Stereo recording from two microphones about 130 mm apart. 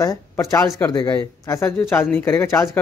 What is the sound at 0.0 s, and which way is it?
Speech, 25° left (ahead or behind).